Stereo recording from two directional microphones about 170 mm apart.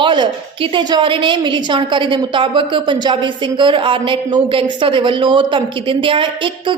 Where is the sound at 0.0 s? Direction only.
30° right (ahead or behind).